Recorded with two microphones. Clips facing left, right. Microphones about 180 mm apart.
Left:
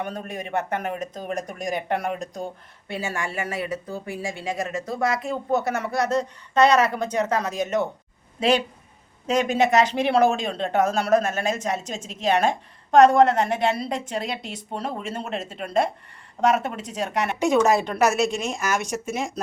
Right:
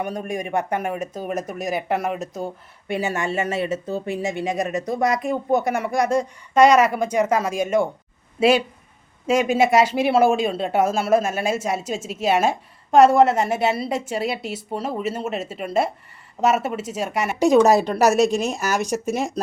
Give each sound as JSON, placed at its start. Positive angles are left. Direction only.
{"t": 0.0, "sound": "speech", "side_deg": -10}
{"t": 2.8, "sound": "speech", "side_deg": -15}
{"t": 17.4, "sound": "speech", "side_deg": -35}